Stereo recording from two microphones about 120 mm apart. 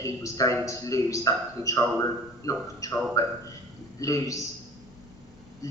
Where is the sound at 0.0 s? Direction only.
25° left (ahead or behind).